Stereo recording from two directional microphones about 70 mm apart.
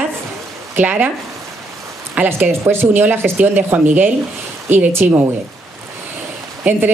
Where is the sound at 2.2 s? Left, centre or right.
Right.